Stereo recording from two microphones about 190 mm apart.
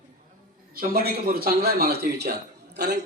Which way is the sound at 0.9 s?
55° right (ahead or behind).